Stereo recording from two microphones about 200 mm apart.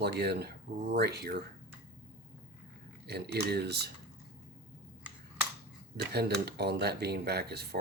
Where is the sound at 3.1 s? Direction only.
55° right (ahead or behind).